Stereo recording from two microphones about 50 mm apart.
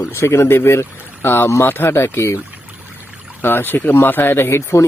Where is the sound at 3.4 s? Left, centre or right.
Left.